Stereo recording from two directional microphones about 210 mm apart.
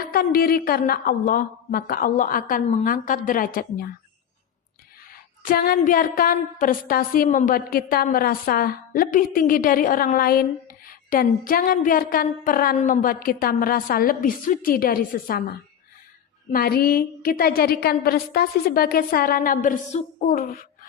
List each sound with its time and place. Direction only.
0.0 s a woman's voice: 45° left (ahead or behind)
5.4 s a woman's voice: 45° left (ahead or behind)